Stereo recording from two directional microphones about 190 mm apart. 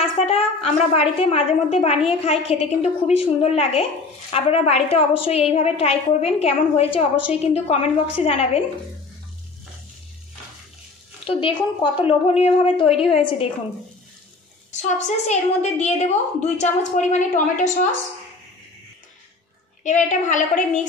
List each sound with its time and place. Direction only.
0.3 s a woman's voice: 35° left (ahead or behind)
11.2 s a woman's voice: 25° left (ahead or behind)
14.7 s a woman's voice: 40° left (ahead or behind)
19.8 s a woman's voice: 40° left (ahead or behind)